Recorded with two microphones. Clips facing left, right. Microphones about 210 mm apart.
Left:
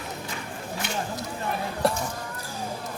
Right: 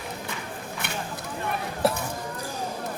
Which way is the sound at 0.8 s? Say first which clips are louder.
Left 3 dB; 55° right (ahead or behind).